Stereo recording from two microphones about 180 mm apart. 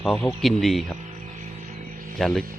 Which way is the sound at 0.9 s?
40° right (ahead or behind).